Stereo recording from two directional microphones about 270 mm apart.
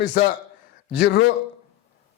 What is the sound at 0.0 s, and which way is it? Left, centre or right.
A man's voice, left.